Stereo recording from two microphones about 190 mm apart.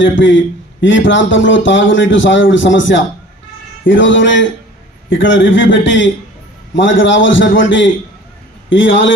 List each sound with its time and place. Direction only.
0.0 s speech: 75° left (ahead or behind)